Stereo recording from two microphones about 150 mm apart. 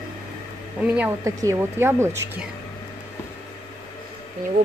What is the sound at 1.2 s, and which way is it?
Speech, 20° right (ahead or behind).